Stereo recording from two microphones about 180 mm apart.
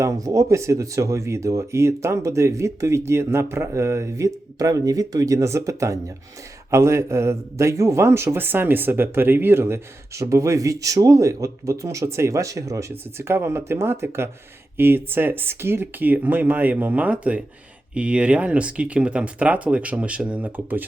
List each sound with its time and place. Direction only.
0.0 s a man's voice: 20° right (ahead or behind)